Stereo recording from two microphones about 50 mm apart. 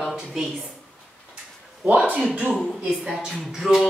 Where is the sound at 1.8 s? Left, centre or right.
Right.